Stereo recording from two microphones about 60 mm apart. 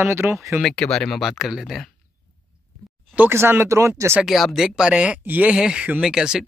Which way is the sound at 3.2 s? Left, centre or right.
Right.